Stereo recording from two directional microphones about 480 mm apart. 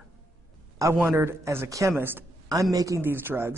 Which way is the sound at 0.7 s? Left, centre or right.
Centre.